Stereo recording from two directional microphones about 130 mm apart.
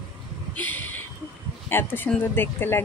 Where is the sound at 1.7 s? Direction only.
15° left (ahead or behind).